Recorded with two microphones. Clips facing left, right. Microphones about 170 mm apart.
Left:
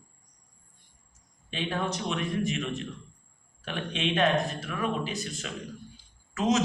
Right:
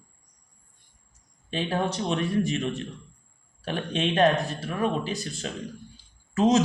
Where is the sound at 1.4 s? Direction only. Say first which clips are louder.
Right 4 dB; 35° right (ahead or behind).